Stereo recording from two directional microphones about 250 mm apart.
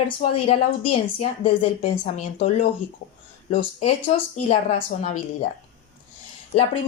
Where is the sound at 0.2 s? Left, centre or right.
Left.